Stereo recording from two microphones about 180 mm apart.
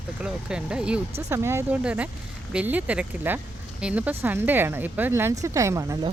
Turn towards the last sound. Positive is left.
turn(degrees=-20)  # may be behind; listen again after turning